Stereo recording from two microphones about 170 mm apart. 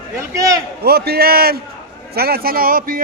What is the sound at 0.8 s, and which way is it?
A man's voice, 65° right (ahead or behind).